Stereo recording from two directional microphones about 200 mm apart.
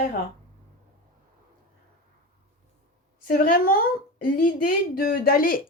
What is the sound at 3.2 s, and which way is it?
A woman's voice, 45° left (ahead or behind).